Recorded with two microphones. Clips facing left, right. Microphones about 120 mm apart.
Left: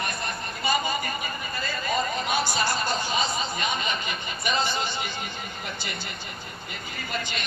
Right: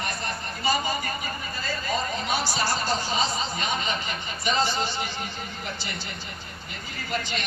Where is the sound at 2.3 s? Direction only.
55° left (ahead or behind).